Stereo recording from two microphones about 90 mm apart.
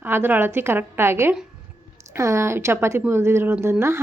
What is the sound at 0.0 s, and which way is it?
A woman's voice, 25° right (ahead or behind).